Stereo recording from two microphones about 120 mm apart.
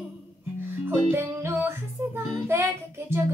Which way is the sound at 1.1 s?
20° right (ahead or behind).